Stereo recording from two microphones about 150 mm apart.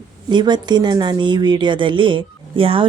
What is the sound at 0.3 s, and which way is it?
A woman's voice, 30° right (ahead or behind).